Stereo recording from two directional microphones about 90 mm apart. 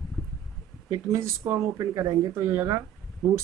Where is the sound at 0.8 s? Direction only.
35° right (ahead or behind).